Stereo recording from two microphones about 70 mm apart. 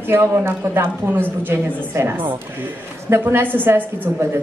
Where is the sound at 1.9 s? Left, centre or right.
Right.